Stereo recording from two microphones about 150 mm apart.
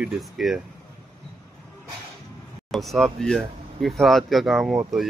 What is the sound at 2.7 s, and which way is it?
Speech, centre (ahead or behind).